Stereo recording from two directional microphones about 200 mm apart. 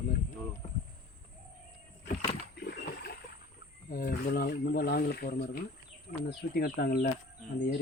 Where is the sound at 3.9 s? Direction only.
45° left (ahead or behind).